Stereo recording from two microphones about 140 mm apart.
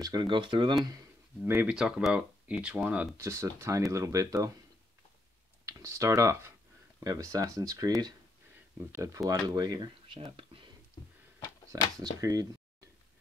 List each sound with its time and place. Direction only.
0.0 s speech: 30° right (ahead or behind)
1.4 s speech: 15° right (ahead or behind)
3.2 s speech: 20° right (ahead or behind)
5.7 s speech: 20° right (ahead or behind); by 10.6 s 40° right (ahead or behind)
12.0 s speech: 25° right (ahead or behind)